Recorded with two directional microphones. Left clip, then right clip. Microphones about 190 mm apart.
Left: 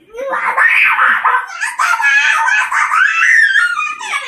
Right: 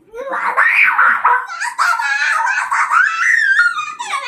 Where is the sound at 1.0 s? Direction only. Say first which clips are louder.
Left 1 dB; 25° right (ahead or behind).